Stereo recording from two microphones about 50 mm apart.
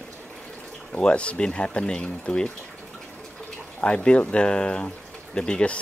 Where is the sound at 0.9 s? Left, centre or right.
Left.